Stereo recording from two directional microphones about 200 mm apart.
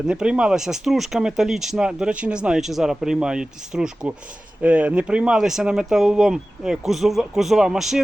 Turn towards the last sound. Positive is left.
turn(degrees=0)  # may be behind; listen again after turning